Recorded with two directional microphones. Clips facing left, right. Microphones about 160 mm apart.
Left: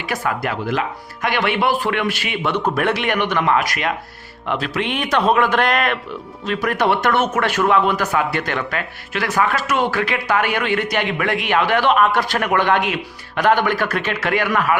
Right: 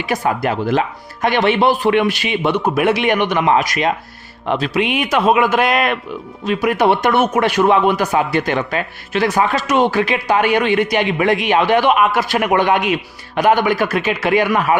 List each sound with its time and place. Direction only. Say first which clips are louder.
0.0 s speech: right 4 dB; 20° right (ahead or behind)